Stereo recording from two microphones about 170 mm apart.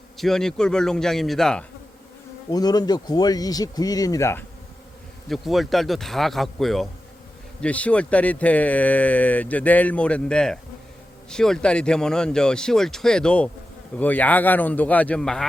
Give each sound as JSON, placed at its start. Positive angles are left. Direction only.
{"t": 0.2, "sound": "speech", "side_deg": 0}
{"t": 2.5, "sound": "speech", "side_deg": 25}
{"t": 5.3, "sound": "speech", "side_deg": 0}